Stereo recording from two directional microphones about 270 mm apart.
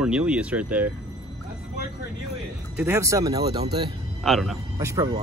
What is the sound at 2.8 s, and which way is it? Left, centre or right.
Speech, centre.